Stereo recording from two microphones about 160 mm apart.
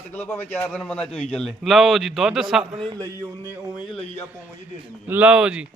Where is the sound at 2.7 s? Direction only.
30° right (ahead or behind).